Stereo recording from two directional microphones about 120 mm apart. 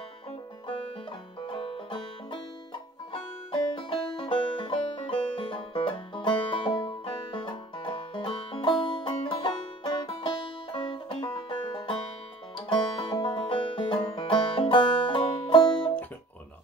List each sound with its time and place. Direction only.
1.4 s music: 50° left (ahead or behind)